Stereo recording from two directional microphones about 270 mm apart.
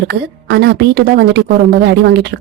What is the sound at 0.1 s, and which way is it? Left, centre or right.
A woman's voice, right.